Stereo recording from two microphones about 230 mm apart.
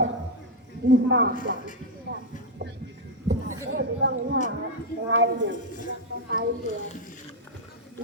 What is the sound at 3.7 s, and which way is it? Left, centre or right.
A woman's voice, right.